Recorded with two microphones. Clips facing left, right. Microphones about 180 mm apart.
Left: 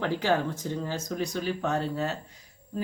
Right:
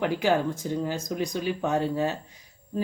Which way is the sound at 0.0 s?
15° right (ahead or behind).